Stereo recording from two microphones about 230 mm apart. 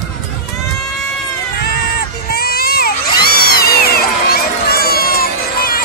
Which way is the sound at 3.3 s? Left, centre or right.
Left.